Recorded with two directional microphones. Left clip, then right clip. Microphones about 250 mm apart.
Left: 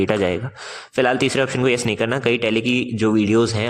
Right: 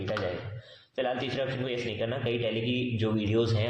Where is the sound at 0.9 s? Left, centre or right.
Left.